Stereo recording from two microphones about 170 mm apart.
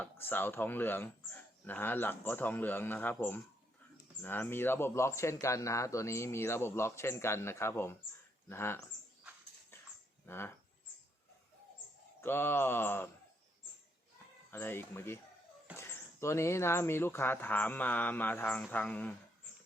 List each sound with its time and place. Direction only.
0.0 s speech: 10° left (ahead or behind)
10.2 s speech: 15° left (ahead or behind)
12.2 s speech: 15° left (ahead or behind)
14.5 s speech: 15° left (ahead or behind)